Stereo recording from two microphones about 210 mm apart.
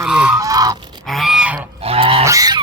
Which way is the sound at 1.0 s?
Centre (ahead or behind).